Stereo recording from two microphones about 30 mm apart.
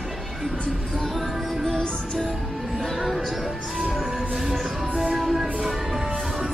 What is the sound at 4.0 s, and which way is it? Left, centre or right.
Music, centre.